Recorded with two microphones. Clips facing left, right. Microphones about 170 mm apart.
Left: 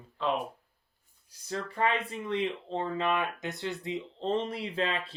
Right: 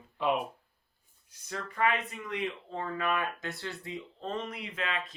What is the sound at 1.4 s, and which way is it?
Speech, 30° left (ahead or behind).